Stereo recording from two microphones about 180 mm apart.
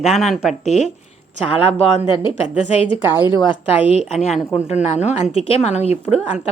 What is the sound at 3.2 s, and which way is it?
Speech, 25° left (ahead or behind).